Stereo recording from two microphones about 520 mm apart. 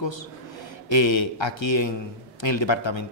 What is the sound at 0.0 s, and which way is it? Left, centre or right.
A man's voice, left.